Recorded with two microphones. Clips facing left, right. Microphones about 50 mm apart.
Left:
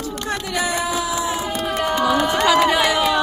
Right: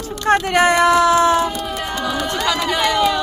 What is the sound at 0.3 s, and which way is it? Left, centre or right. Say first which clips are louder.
Speech: right 10 dB; right.